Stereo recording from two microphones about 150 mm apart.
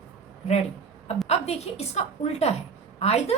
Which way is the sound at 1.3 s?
45° left (ahead or behind).